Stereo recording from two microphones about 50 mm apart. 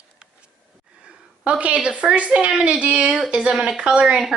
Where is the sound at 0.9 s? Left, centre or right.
Centre.